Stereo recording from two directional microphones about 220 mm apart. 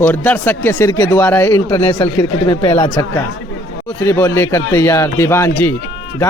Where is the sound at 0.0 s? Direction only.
10° left (ahead or behind).